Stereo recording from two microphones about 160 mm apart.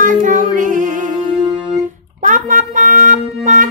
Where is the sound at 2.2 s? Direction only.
55° right (ahead or behind).